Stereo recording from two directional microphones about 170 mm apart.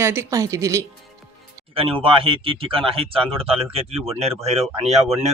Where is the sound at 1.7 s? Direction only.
35° right (ahead or behind).